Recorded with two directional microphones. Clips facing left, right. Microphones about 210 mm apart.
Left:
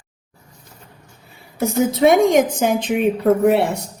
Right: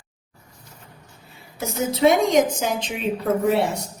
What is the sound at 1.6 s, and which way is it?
A woman's voice, 55° left (ahead or behind).